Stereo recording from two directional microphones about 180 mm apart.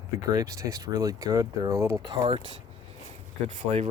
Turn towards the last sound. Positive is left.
turn(degrees=-40)  # may be behind; listen again after turning